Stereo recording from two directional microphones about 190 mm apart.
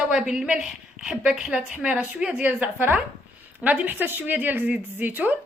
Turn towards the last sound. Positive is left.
turn(degrees=-10)  # may be behind; listen again after turning